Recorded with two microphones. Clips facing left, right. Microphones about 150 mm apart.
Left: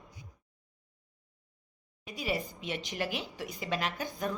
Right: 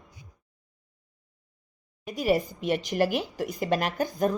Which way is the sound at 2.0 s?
45° right (ahead or behind).